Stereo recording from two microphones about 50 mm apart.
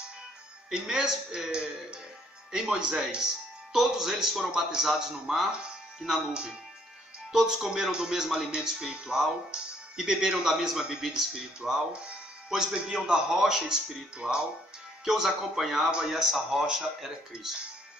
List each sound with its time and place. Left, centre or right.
0.7 s speech: centre
7.3 s speech: centre
14.2 s speech: centre
15.0 s speech: centre